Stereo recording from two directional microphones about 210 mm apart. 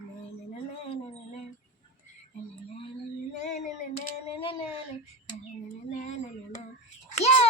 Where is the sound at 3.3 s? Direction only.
35° left (ahead or behind).